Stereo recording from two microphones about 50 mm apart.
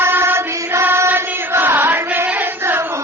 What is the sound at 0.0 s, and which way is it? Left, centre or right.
Chant, right.